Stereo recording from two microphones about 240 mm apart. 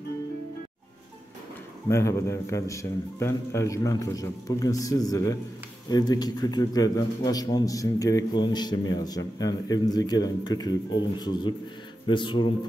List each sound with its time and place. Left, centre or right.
1.9 s a man's voice: centre